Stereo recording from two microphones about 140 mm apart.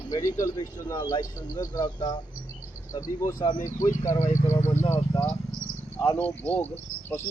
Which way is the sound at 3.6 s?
65° left (ahead or behind).